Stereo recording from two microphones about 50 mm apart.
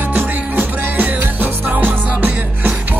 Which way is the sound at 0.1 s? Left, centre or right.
Right.